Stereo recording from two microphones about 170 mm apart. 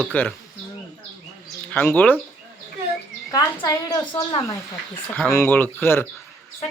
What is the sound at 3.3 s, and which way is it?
A woman's voice, 20° left (ahead or behind).